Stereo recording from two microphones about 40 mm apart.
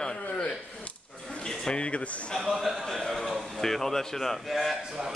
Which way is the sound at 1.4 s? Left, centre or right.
Centre.